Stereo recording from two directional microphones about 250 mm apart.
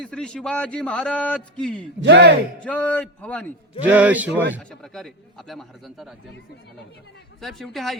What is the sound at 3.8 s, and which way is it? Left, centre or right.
A man's voice, centre.